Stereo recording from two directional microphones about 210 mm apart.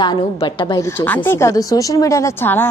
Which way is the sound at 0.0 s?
20° left (ahead or behind).